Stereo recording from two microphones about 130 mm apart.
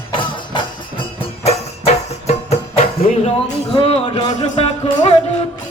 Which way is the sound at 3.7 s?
45° left (ahead or behind).